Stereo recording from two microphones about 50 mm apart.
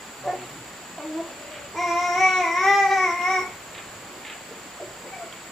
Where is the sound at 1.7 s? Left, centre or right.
Centre.